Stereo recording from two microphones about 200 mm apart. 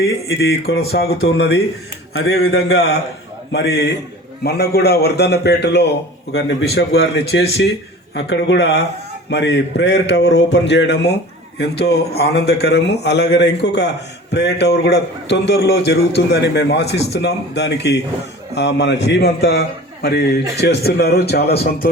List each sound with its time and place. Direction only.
0.3 s speech: 75° left (ahead or behind)
0.9 s speech: 50° left (ahead or behind)
2.1 s a man's voice: 90° left
3.5 s a man's voice: 55° left (ahead or behind)